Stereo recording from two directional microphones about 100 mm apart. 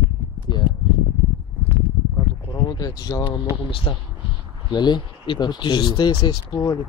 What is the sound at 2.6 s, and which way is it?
Speech, 40° left (ahead or behind).